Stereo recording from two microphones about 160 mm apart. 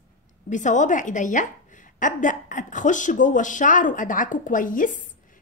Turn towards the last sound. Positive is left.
turn(degrees=55)  # may be behind; listen again after turning